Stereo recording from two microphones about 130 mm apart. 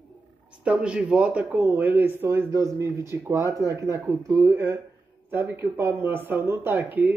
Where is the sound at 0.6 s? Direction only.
10° right (ahead or behind).